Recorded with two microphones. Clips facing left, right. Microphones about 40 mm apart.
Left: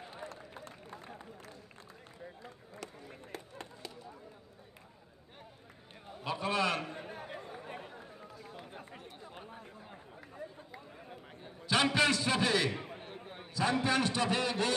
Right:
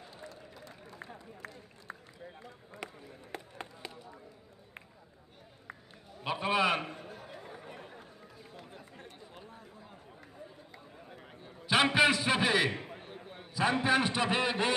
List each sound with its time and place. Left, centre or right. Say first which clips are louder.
0.0 s run: left 3 dB; left
1.4 s a sound: right 3 dB; right
2.8 s a sound: right 2 dB; right
6.2 s a man's voice: right 3 dB; right
6.9 s chatter: left 2 dB; left
7.5 s run: left 2 dB; left
9.3 s chatter: left 2 dB; left
10.7 s chatter: left 2 dB; centre
11.6 s a sound: right 3 dB; centre
12.7 s a sound: even; centre
13.0 s basketball bounce: left 1 dB; centre
13.6 s a man's voice: right 2 dB; right